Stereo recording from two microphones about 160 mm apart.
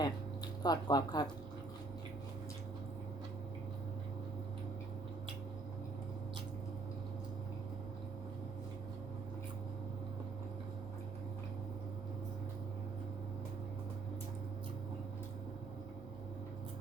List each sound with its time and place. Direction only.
0.0 s speech: 25° left (ahead or behind)